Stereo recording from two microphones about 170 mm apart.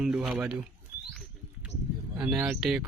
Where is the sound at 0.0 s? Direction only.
5° right (ahead or behind).